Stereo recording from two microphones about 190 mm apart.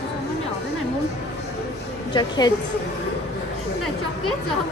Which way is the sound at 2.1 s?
20° left (ahead or behind).